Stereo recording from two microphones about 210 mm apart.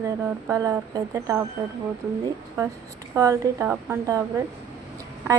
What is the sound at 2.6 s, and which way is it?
A woman's voice, 15° right (ahead or behind).